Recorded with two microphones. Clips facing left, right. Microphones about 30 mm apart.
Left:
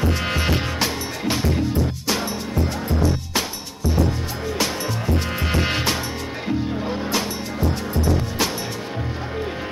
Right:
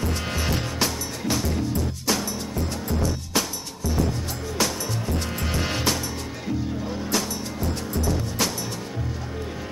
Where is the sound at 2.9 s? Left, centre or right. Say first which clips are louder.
Left 1 dB; left.